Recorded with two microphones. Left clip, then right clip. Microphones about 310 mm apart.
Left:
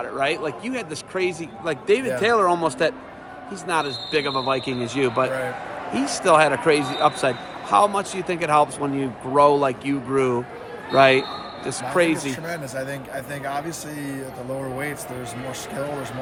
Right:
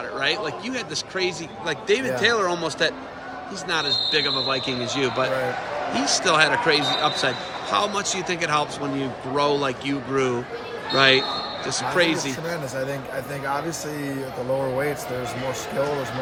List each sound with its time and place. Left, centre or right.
0.2 s a man's voice: centre
12.3 s speech: centre